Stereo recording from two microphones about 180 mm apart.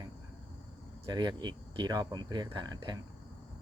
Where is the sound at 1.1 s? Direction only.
25° right (ahead or behind).